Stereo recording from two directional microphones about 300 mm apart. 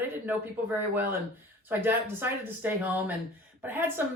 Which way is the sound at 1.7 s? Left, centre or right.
Centre.